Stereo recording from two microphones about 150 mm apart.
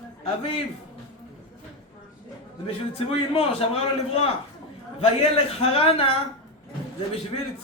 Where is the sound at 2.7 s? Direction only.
40° left (ahead or behind).